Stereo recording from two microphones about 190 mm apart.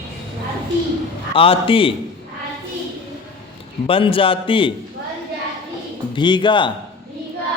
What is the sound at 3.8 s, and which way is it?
Speech, 30° left (ahead or behind).